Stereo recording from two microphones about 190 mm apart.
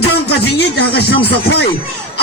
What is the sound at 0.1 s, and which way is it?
Speech, 60° left (ahead or behind).